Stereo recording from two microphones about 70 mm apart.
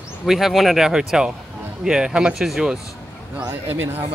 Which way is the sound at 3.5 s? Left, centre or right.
Right.